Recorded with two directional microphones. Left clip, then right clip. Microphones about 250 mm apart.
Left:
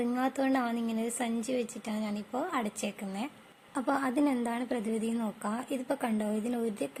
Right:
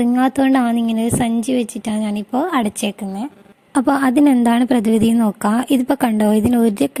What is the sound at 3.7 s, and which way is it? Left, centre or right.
A woman's voice, right.